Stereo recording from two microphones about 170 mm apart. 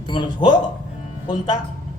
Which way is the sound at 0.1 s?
30° left (ahead or behind).